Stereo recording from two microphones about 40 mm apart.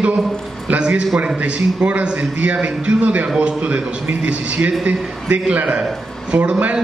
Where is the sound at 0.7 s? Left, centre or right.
Right.